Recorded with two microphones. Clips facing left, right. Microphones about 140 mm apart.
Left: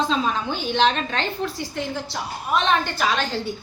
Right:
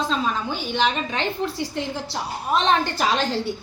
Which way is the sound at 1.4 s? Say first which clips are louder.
Right 1 dB; 25° right (ahead or behind).